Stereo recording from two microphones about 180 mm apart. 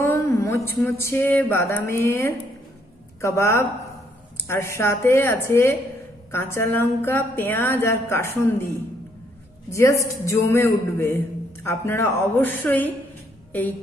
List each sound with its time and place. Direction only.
0.0 s a sound: 15° left (ahead or behind)
0.7 s a woman's voice: 10° left (ahead or behind)
9.7 s a woman's voice: 15° left (ahead or behind)